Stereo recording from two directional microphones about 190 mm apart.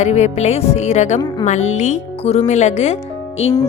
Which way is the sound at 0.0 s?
35° left (ahead or behind).